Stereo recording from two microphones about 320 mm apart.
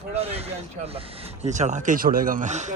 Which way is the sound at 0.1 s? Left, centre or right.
Centre.